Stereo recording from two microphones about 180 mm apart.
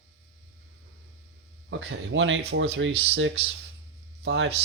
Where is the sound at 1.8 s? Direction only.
90° right.